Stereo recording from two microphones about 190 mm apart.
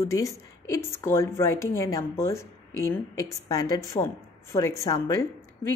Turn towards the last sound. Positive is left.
turn(degrees=20)  # may be behind; listen again after turning